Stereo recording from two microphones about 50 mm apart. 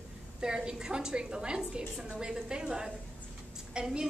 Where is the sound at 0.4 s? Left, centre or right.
Centre.